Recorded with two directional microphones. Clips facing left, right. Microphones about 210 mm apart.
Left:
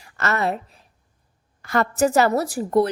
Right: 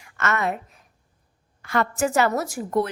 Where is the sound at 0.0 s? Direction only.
35° left (ahead or behind).